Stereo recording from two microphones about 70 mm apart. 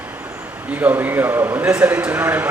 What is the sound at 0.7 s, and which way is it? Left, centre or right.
A man's voice, right.